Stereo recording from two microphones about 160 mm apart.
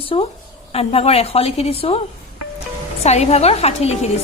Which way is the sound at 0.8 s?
40° left (ahead or behind).